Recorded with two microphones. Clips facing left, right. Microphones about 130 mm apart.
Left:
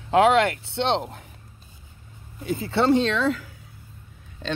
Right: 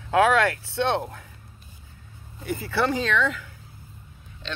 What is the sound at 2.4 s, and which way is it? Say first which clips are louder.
Speech: left 4 dB; 25° left (ahead or behind).